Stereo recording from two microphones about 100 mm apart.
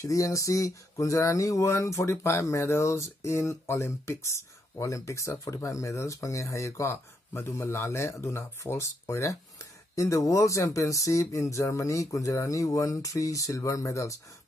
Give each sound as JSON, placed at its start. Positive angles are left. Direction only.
{"t": 0.0, "sound": "speech", "side_deg": 30}